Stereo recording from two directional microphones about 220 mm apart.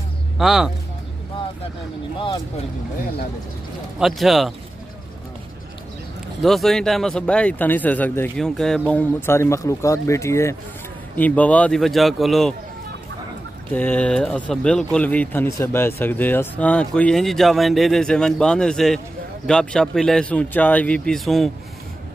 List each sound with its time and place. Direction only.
0.4 s speech: centre (ahead or behind)
2.1 s speech: 20° left (ahead or behind)
4.0 s speech: centre (ahead or behind)
6.4 s a man's voice: centre (ahead or behind)
13.7 s a man's voice: 5° left (ahead or behind)